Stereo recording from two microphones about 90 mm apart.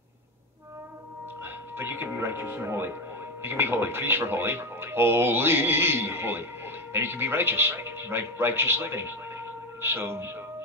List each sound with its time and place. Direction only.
1.4 s speech: 25° right (ahead or behind)